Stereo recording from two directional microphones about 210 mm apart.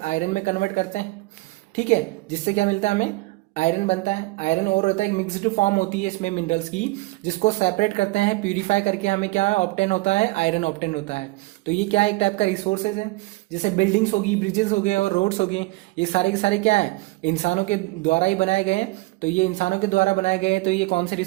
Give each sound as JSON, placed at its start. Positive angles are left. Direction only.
{"t": 0.0, "sound": "a woman's voice", "side_deg": 35}